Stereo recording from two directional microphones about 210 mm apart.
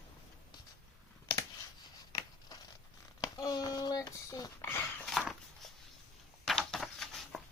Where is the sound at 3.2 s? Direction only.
15° left (ahead or behind).